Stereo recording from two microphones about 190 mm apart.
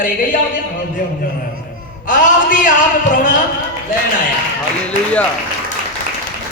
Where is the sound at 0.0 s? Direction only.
45° left (ahead or behind).